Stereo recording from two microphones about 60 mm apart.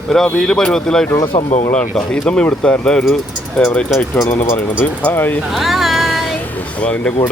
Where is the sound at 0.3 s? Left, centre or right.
Centre.